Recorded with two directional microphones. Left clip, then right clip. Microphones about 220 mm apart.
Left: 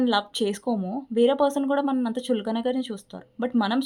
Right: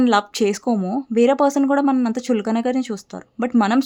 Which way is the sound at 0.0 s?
30° right (ahead or behind).